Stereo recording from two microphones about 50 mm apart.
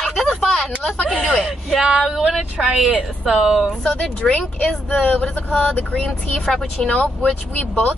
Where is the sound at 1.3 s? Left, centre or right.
Centre.